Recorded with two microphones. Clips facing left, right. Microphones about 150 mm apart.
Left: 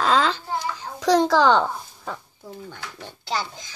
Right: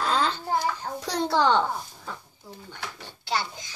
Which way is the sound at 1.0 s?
90° left.